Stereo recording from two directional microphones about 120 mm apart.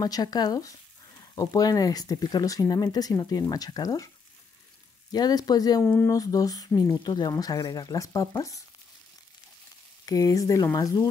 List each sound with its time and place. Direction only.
0.0 s speech: 35° left (ahead or behind)
5.1 s speech: 35° left (ahead or behind)
5.9 s speech: 20° left (ahead or behind)
6.1 s speech: 30° left (ahead or behind)
10.0 s speech: 30° left (ahead or behind)